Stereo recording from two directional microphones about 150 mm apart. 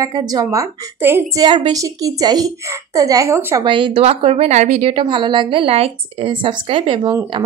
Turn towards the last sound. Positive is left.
turn(degrees=-35)  # may be behind; listen again after turning